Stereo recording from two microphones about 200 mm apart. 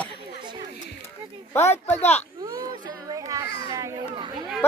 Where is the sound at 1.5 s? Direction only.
15° left (ahead or behind).